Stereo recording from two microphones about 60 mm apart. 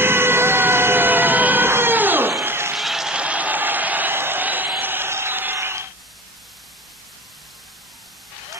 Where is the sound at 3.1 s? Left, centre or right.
Right.